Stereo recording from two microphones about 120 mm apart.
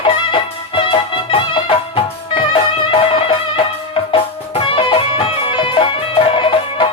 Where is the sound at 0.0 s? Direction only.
45° left (ahead or behind).